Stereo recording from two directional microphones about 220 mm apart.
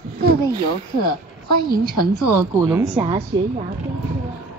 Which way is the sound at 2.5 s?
15° right (ahead or behind).